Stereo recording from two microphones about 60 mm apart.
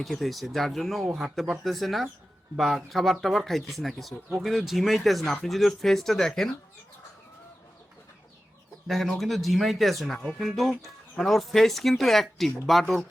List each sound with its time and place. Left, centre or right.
0.0 s speech: centre
8.9 s speech: centre